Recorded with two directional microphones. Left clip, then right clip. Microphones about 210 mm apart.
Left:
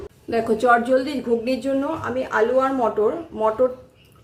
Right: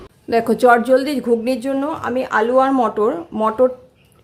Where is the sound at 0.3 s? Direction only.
45° right (ahead or behind).